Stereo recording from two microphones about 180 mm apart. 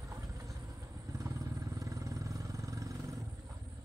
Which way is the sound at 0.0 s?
20° right (ahead or behind).